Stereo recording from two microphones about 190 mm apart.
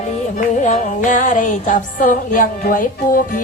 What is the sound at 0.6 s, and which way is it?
Music, 40° left (ahead or behind).